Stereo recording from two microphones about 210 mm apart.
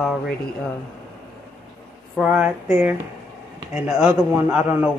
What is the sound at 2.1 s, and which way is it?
Speech, 5° right (ahead or behind).